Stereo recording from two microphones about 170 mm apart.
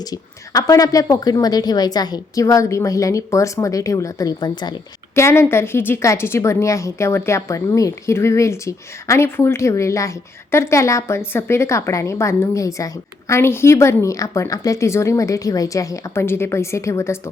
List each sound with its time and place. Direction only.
0.0 s a woman's voice: 20° left (ahead or behind)